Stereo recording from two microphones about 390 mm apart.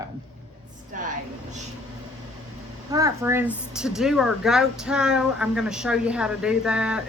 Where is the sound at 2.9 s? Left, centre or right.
Centre.